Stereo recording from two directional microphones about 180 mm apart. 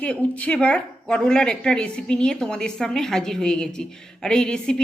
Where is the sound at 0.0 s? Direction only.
5° left (ahead or behind).